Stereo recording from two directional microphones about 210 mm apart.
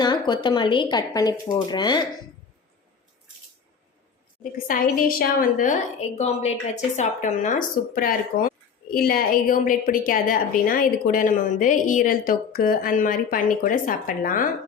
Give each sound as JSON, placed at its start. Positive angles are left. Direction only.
{"t": 0.0, "sound": "speech", "side_deg": 20}
{"t": 4.5, "sound": "speech", "side_deg": 45}
{"t": 6.1, "sound": "speech", "side_deg": 30}